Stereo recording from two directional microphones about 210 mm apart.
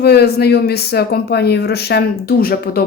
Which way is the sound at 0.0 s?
50° left (ahead or behind).